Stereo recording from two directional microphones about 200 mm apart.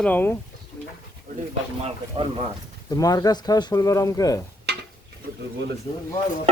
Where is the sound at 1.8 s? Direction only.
30° right (ahead or behind).